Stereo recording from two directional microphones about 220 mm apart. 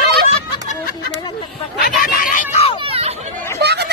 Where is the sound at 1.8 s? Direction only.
40° left (ahead or behind).